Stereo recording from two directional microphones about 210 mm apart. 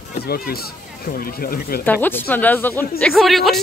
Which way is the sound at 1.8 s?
10° left (ahead or behind).